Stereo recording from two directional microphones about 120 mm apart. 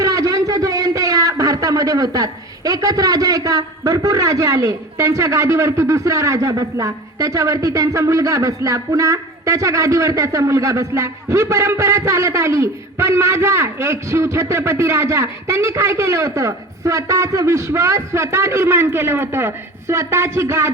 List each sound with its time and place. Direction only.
0.0 s a man's voice: 30° right (ahead or behind)